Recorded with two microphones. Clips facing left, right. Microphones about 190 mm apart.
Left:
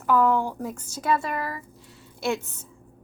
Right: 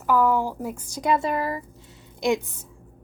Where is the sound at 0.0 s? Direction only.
5° right (ahead or behind); by 1.6 s 25° right (ahead or behind).